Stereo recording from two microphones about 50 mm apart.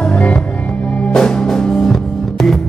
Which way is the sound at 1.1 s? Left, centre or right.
Centre.